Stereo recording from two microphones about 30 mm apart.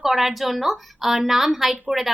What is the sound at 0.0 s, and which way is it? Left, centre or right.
A woman's voice, centre.